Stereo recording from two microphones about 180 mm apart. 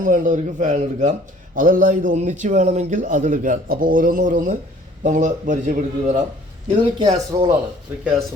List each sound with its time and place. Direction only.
0.0 s a man's voice: 45° right (ahead or behind)
7.0 s speech: 20° right (ahead or behind)